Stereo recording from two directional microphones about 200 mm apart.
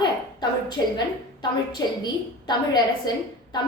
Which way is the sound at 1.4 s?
20° left (ahead or behind).